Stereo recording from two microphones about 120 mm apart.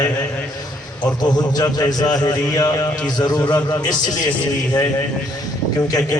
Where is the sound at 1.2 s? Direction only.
30° left (ahead or behind).